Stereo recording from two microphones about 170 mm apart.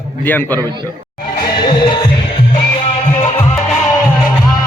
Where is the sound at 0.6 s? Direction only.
25° right (ahead or behind).